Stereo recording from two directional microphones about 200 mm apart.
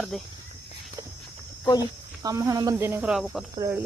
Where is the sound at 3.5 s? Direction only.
15° right (ahead or behind).